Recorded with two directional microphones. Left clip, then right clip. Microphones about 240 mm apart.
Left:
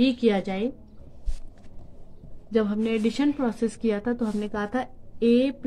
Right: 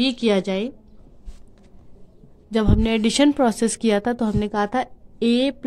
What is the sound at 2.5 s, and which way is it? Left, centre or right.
A woman's voice, right.